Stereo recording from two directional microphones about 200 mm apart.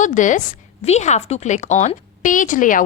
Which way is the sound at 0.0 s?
40° left (ahead or behind).